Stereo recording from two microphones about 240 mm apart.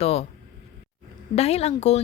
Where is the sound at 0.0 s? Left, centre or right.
Left.